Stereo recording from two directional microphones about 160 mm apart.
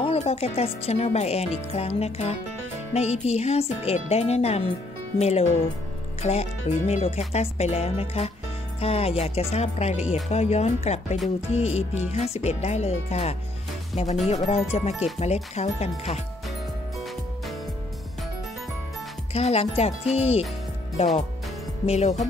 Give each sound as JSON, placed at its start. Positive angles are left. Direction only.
{"t": 0.0, "sound": "speech", "side_deg": 40}
{"t": 19.3, "sound": "speech", "side_deg": 40}
{"t": 21.8, "sound": "speech", "side_deg": 45}